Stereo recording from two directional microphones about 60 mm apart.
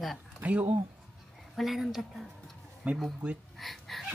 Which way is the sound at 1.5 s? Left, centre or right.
Centre.